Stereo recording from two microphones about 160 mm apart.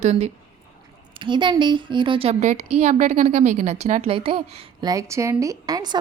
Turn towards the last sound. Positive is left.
turn(degrees=-25)  # may be behind; listen again after turning